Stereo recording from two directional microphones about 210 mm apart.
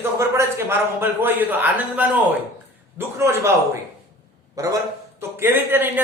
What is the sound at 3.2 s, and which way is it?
A man's voice, 15° right (ahead or behind).